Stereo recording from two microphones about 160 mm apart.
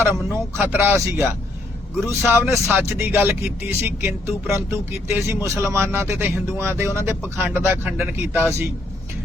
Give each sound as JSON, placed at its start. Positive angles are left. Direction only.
{"t": 0.0, "sound": "speech", "side_deg": -15}